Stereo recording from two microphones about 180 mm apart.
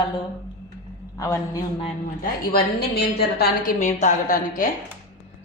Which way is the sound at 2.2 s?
60° left (ahead or behind).